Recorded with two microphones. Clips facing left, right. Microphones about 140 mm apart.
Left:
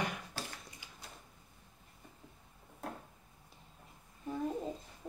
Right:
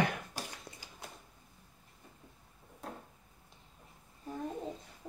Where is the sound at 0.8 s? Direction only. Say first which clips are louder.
Right 2 dB; 40° right (ahead or behind).